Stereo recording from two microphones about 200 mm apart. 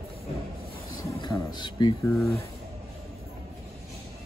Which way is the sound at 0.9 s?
20° left (ahead or behind).